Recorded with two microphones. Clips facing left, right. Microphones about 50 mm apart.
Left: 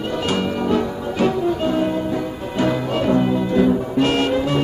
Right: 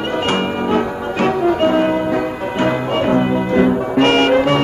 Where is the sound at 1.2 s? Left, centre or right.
Right.